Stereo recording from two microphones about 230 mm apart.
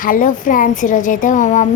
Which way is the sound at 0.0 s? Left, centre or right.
Left.